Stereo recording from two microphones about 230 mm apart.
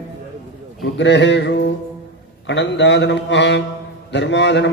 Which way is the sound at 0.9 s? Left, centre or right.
Left.